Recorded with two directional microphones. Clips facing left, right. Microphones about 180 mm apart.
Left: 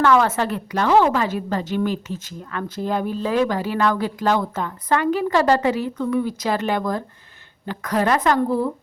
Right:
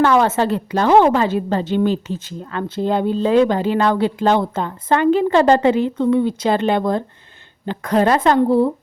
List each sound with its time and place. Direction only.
0.0 s a woman's voice: 25° right (ahead or behind)